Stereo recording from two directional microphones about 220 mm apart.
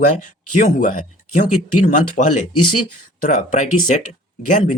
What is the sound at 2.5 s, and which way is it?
Speech, 90° left.